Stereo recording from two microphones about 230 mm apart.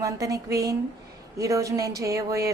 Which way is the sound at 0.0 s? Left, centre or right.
Centre.